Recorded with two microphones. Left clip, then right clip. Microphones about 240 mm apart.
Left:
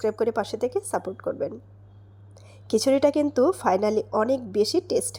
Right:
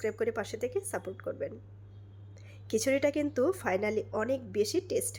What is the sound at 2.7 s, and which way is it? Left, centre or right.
Speech, centre.